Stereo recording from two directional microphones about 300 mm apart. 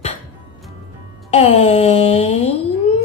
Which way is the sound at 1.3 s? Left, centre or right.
Left.